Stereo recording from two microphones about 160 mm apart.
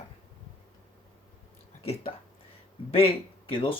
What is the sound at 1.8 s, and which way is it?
Speech, 40° left (ahead or behind).